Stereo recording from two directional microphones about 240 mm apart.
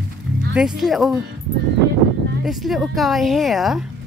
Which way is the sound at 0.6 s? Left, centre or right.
Centre.